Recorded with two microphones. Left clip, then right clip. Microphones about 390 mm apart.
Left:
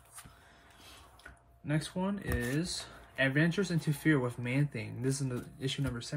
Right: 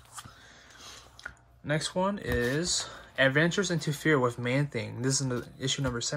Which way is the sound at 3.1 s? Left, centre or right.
Centre.